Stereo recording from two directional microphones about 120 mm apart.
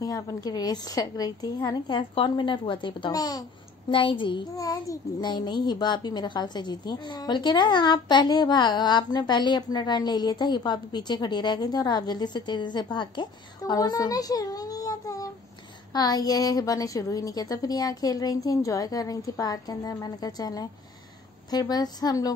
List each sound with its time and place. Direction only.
0.0 s a child's voice: 30° left (ahead or behind)
3.9 s a child's voice: 45° left (ahead or behind)
4.6 s a child's voice: 30° left (ahead or behind)